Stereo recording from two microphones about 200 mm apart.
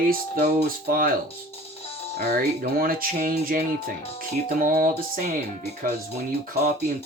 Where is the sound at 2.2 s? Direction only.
50° right (ahead or behind).